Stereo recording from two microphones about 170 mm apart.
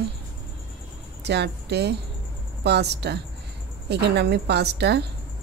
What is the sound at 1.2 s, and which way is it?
A woman's voice, 80° right.